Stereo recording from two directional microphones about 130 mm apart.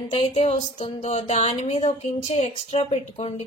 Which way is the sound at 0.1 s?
55° left (ahead or behind).